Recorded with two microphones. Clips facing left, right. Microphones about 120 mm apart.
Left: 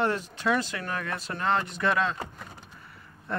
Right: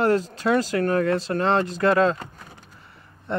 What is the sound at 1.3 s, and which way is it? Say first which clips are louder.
Speech: right 6 dB; 35° right (ahead or behind).